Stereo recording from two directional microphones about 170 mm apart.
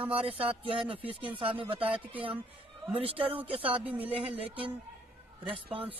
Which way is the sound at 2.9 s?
35° right (ahead or behind).